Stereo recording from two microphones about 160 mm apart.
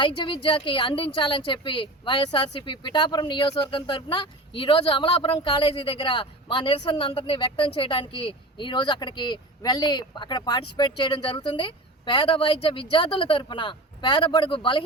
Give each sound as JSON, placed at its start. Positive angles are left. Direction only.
{"t": 0.0, "sound": "a woman's voice", "side_deg": 30}